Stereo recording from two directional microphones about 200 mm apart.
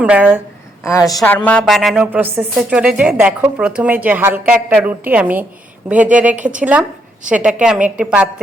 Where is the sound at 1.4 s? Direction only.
5° left (ahead or behind).